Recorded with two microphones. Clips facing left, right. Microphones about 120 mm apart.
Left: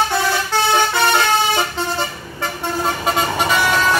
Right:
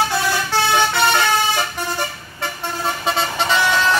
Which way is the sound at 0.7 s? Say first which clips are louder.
Even; 20° left (ahead or behind).